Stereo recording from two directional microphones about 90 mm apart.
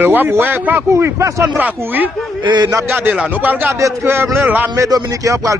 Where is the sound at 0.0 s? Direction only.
20° right (ahead or behind).